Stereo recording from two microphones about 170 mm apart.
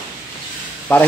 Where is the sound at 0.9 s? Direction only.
10° left (ahead or behind).